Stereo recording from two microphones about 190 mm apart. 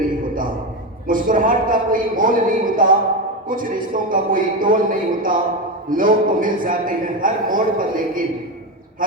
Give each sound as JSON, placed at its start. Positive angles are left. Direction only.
{"t": 1.0, "sound": "a man's voice", "side_deg": -45}